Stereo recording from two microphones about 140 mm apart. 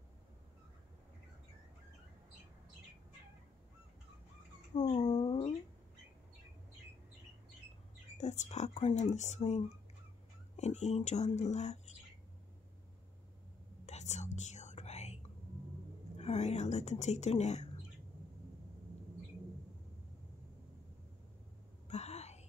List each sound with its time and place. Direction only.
4.7 s a sound: 45° left (ahead or behind)
5.0 s a sound: 35° left (ahead or behind)
8.2 s a woman's voice: 55° left (ahead or behind)
13.8 s whispering: 55° left (ahead or behind)
16.2 s a woman's voice: 50° left (ahead or behind)
21.8 s wail: 50° left (ahead or behind)